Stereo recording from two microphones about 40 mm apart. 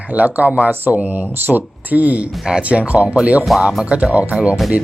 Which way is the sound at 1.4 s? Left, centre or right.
Right.